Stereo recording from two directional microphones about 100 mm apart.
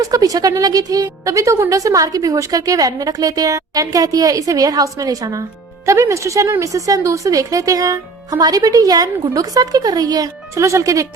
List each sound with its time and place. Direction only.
0.0 s a woman's voice: 35° right (ahead or behind)